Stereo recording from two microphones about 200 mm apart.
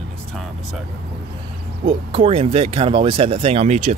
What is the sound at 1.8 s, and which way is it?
Speech, 25° right (ahead or behind).